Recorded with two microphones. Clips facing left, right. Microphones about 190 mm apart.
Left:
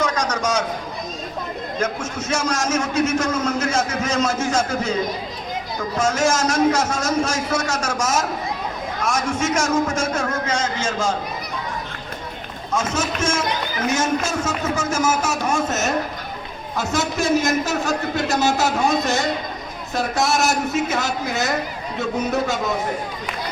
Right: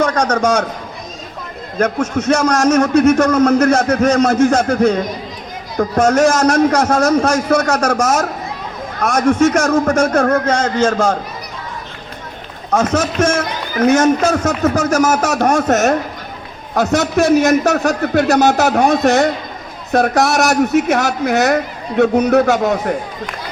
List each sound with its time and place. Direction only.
0.0 s a man's voice: 60° right (ahead or behind)
1.8 s a man's voice: 60° right (ahead or behind)
12.7 s a man's voice: 65° right (ahead or behind)